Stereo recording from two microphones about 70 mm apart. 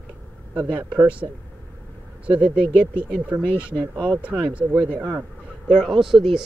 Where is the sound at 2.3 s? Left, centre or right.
Right.